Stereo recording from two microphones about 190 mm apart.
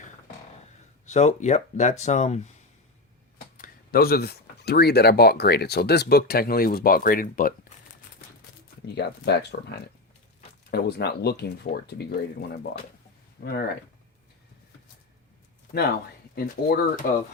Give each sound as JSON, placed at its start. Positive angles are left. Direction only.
{"t": 1.0, "sound": "speech", "side_deg": 35}
{"t": 3.6, "sound": "speech", "side_deg": 55}
{"t": 9.0, "sound": "speech", "side_deg": 60}
{"t": 16.3, "sound": "speech", "side_deg": 55}